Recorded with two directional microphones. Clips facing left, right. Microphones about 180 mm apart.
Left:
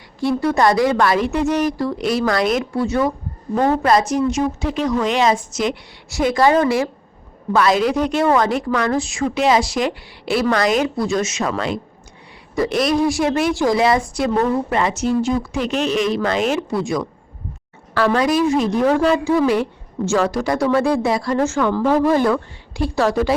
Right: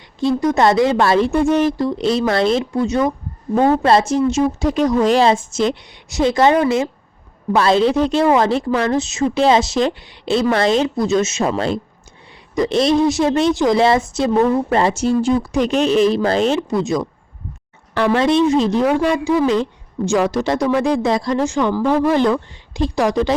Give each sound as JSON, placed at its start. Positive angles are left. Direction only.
{"t": 0.3, "sound": "speech", "side_deg": -20}
{"t": 14.7, "sound": "speech", "side_deg": -30}
{"t": 16.6, "sound": "speech", "side_deg": -20}
{"t": 18.9, "sound": "speech", "side_deg": -15}
{"t": 21.8, "sound": "speech", "side_deg": 0}
{"t": 22.1, "sound": "speech", "side_deg": -20}